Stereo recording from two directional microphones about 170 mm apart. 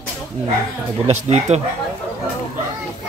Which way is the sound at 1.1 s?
40° right (ahead or behind).